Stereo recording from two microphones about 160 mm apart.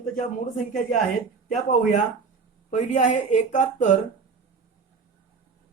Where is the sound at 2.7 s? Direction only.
50° left (ahead or behind).